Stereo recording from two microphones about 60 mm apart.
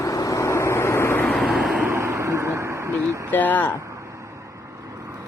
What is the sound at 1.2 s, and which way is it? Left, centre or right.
Vehicle, centre.